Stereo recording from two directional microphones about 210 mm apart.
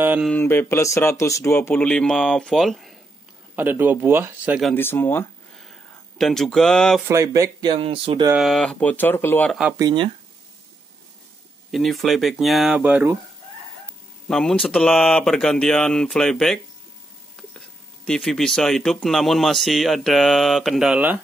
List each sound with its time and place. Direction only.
0.0 s speech: 10° right (ahead or behind)
0.3 s speech: 10° left (ahead or behind)
4.7 s speech: 10° left (ahead or behind)
5.7 s a sound: centre (ahead or behind)
7.1 s speech: 15° right (ahead or behind)
8.3 s speech: centre (ahead or behind)
9.8 s speech: 20° right (ahead or behind)
11.7 s speech: centre (ahead or behind)
14.2 s speech: 5° left (ahead or behind)
18.0 s speech: centre (ahead or behind)